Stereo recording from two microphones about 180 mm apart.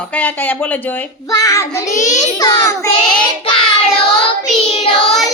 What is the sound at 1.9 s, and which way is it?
Speech, 45° left (ahead or behind).